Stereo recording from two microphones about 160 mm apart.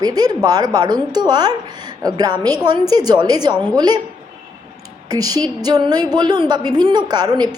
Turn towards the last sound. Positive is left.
turn(degrees=-25)  # may be behind; listen again after turning